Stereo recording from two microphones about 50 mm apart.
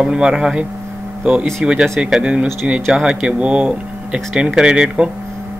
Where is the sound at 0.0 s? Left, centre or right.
Centre.